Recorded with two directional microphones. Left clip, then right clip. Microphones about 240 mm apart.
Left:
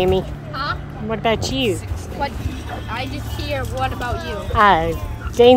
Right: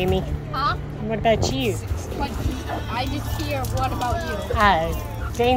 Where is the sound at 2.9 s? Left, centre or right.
Centre; by 5.5 s left.